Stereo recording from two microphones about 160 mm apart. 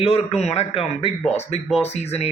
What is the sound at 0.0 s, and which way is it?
Speech, 40° left (ahead or behind).